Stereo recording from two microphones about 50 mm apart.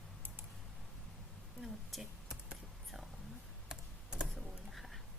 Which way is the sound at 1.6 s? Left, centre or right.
Centre.